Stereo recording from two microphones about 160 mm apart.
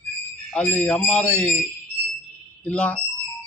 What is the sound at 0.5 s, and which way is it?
A man's voice, 10° left (ahead or behind).